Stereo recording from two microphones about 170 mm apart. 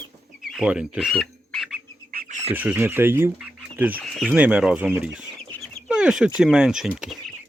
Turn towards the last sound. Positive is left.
turn(degrees=-5)  # may be behind; listen again after turning